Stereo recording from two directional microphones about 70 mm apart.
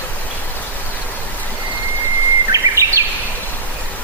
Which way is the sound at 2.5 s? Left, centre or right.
Right.